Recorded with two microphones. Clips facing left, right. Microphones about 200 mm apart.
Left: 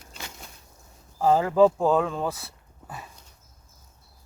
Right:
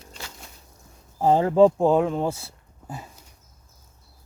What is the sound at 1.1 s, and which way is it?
Speech, 25° right (ahead or behind).